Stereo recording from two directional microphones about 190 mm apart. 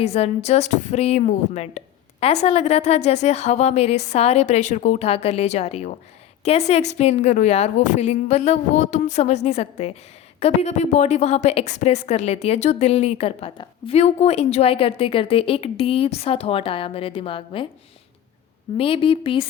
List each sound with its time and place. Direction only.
0.0 s a woman's voice: 35° left (ahead or behind)
18.8 s speech: 30° left (ahead or behind)